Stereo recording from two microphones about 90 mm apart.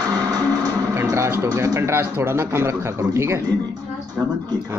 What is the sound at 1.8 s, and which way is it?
A man's voice, 25° right (ahead or behind).